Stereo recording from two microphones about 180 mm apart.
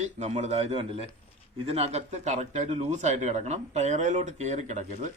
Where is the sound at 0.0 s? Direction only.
40° right (ahead or behind).